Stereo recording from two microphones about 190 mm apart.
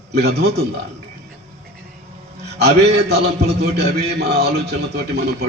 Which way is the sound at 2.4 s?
60° right (ahead or behind).